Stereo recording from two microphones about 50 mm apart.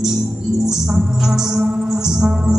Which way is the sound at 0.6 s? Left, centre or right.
Centre.